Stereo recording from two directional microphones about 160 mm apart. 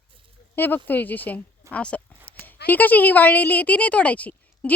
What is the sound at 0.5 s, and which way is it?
Speech, 10° left (ahead or behind).